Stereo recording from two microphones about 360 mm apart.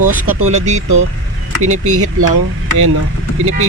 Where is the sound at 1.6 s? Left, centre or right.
Right.